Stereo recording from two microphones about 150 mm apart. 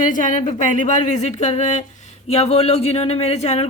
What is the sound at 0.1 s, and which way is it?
A woman's voice, 60° left (ahead or behind).